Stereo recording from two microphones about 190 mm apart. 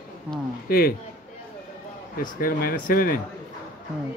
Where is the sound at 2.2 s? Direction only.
50° left (ahead or behind).